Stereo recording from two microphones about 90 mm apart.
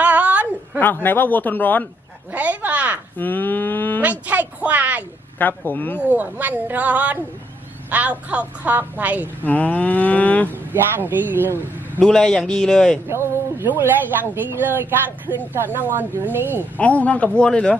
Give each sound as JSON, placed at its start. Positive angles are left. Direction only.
{"t": 0.0, "sound": "a sound", "side_deg": -15}
{"t": 1.0, "sound": "speech", "side_deg": 20}
{"t": 2.3, "sound": "a sound", "side_deg": -15}
{"t": 3.2, "sound": "cattle", "side_deg": 20}
{"t": 4.3, "sound": "a woman's voice", "side_deg": -20}
{"t": 5.4, "sound": "speech", "side_deg": 20}
{"t": 6.0, "sound": "a woman's voice", "side_deg": -15}
{"t": 9.2, "sound": "cattle", "side_deg": 20}
{"t": 10.5, "sound": "speech", "side_deg": -20}
{"t": 11.9, "sound": "cattle", "side_deg": 5}
{"t": 13.1, "sound": "speech", "side_deg": -30}
{"t": 16.7, "sound": "cattle", "side_deg": 15}